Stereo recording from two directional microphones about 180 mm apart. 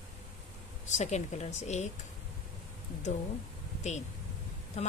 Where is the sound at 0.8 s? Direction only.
40° left (ahead or behind).